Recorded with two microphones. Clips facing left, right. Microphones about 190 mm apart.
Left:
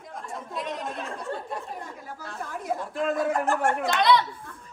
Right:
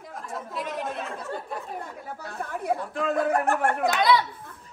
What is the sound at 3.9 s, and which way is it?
Chatter, 5° right (ahead or behind).